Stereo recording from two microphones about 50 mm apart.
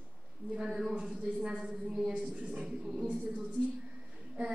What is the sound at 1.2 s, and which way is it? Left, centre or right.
Speech, right.